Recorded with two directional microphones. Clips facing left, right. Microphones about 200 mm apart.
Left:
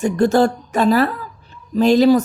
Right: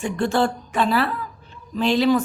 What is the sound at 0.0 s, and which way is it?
A woman's voice, 40° left (ahead or behind).